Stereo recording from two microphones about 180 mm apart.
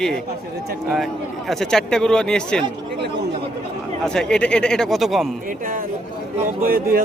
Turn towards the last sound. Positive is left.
turn(degrees=-55)  # may be behind; listen again after turning